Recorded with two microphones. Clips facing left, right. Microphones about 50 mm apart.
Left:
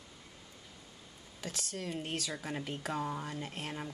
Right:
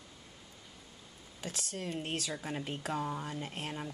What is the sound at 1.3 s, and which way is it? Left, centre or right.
Speech, right.